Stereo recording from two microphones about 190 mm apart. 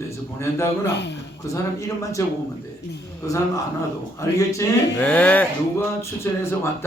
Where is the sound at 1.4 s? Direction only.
15° left (ahead or behind).